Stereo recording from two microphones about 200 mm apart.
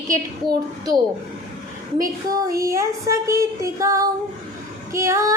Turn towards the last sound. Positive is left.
turn(degrees=-15)  # may be behind; listen again after turning